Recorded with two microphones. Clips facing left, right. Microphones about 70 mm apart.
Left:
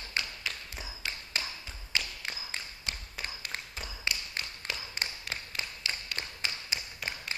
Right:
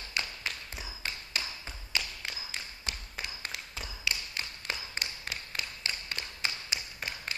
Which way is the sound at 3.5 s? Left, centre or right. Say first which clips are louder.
Left 1 dB; left.